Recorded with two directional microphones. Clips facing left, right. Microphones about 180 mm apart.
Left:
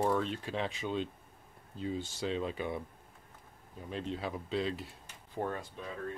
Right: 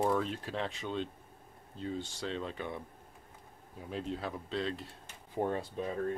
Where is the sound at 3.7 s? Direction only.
Centre (ahead or behind).